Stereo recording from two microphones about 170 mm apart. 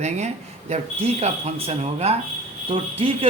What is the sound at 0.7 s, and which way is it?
Speech, 40° right (ahead or behind).